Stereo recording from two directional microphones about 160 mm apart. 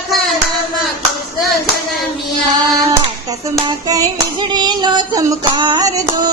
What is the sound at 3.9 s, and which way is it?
Female singing, 25° right (ahead or behind).